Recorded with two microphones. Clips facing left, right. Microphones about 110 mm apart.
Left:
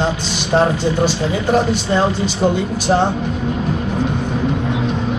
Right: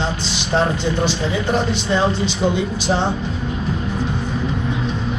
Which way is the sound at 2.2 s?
45° left (ahead or behind).